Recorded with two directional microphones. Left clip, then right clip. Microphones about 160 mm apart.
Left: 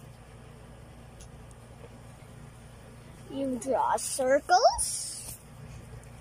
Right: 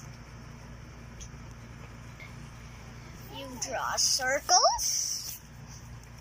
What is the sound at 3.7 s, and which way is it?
Speech, 50° left (ahead or behind).